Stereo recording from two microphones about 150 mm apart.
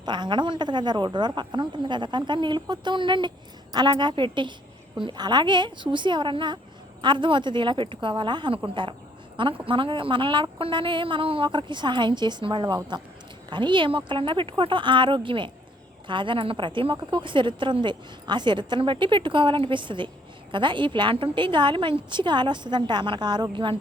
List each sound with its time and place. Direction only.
0.0 s a woman's voice: 30° right (ahead or behind)